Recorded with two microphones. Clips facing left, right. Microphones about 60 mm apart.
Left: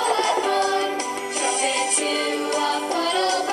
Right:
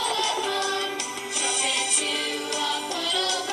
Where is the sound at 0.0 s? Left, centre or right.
Left.